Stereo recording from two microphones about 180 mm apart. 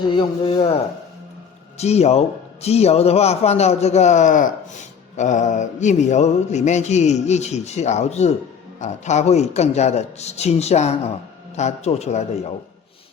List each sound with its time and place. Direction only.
0.2 s a man's voice: 30° left (ahead or behind)
1.8 s speech: 35° left (ahead or behind)